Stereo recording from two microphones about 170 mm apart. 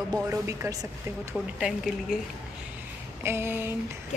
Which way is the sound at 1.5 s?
5° right (ahead or behind).